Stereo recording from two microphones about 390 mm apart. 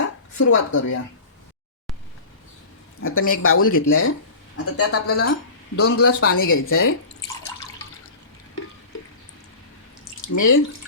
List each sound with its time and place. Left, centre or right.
0.3 s speech: left
3.0 s speech: left
10.2 s speech: left